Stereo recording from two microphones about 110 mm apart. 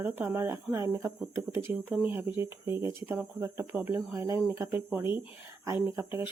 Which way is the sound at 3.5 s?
20° right (ahead or behind).